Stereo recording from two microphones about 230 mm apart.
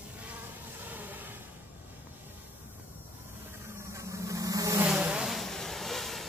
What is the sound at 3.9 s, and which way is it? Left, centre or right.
Vehicle, centre.